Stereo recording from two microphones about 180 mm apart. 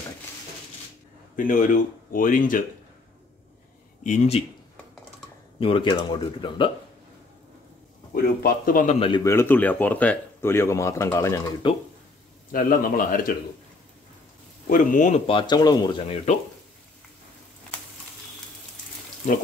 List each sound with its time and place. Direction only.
1.3 s speech: 50° left (ahead or behind)
4.0 s speech: 40° left (ahead or behind)
5.6 s speech: 30° left (ahead or behind)
8.1 s speech: 55° left (ahead or behind)
9.2 s speech: 15° left (ahead or behind)
11.6 s speech: 25° left (ahead or behind)
12.5 s speech: 50° left (ahead or behind)
14.7 s speech: 45° left (ahead or behind)
15.3 s speech: 25° left (ahead or behind)